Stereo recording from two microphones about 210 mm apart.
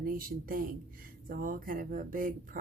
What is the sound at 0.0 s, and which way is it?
Speech, 45° right (ahead or behind).